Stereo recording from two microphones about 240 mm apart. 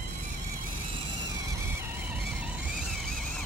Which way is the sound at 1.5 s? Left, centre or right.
Centre.